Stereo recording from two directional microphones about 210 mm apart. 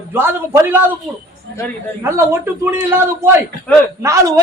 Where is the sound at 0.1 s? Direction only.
10° right (ahead or behind).